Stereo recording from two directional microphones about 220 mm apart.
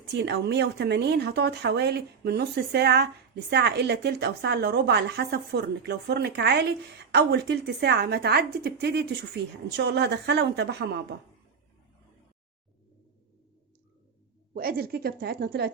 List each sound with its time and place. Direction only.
0.1 s a woman's voice: 50° right (ahead or behind)
14.5 s a woman's voice: 45° right (ahead or behind)